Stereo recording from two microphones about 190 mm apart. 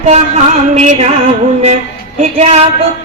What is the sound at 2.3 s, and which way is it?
Speech, 35° right (ahead or behind).